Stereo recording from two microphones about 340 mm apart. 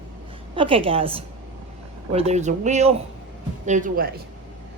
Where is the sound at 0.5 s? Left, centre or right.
Centre.